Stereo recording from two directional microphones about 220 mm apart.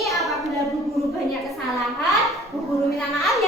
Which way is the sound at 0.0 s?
Centre (ahead or behind).